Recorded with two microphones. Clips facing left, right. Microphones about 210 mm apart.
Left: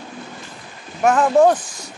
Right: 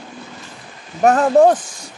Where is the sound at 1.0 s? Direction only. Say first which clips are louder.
Right 2 dB; 40° right (ahead or behind).